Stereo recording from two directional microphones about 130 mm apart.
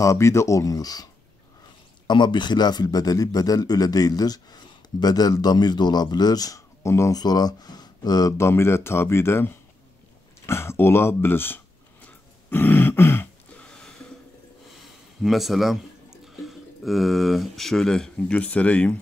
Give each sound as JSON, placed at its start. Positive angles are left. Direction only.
{"t": 0.0, "sound": "a man's voice", "side_deg": 25}
{"t": 2.0, "sound": "a man's voice", "side_deg": 35}
{"t": 10.4, "sound": "a sound", "side_deg": 20}
{"t": 15.2, "sound": "speech", "side_deg": 0}